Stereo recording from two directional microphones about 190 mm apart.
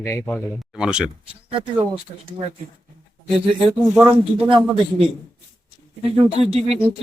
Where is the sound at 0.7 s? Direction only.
5° right (ahead or behind).